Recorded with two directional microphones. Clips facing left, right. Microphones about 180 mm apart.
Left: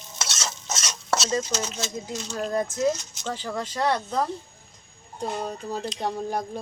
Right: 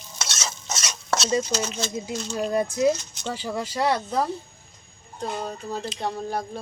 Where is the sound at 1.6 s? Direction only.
Centre (ahead or behind).